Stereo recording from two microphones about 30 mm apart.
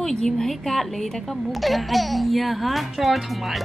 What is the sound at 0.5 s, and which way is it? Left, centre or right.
Speech, centre.